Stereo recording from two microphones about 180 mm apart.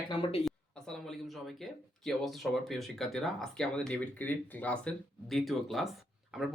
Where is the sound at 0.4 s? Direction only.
Centre (ahead or behind).